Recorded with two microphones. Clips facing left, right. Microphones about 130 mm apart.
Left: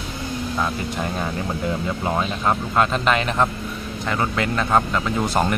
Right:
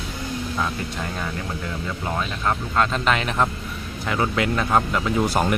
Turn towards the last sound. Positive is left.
turn(degrees=-5)  # may be behind; listen again after turning